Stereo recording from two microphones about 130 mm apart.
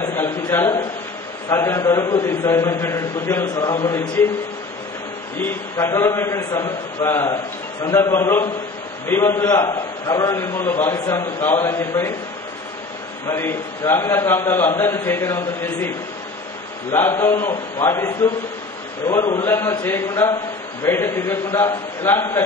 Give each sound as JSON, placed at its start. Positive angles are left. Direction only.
{"t": 0.0, "sound": "a man's voice", "side_deg": 20}
{"t": 5.4, "sound": "a man's voice", "side_deg": 20}
{"t": 13.3, "sound": "a man's voice", "side_deg": 20}
{"t": 16.9, "sound": "a man's voice", "side_deg": 20}